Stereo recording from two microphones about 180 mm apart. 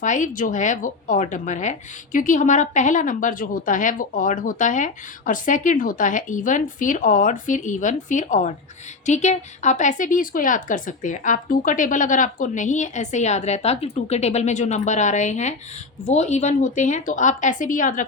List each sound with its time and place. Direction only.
0.0 s a woman's voice: 45° left (ahead or behind)